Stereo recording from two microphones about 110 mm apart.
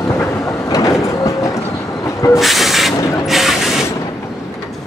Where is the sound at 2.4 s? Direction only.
Centre (ahead or behind).